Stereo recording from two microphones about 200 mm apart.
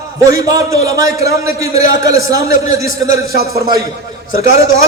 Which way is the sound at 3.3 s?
50° right (ahead or behind).